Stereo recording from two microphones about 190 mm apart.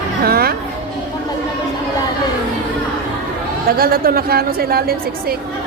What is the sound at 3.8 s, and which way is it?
A woman's voice, 55° right (ahead or behind).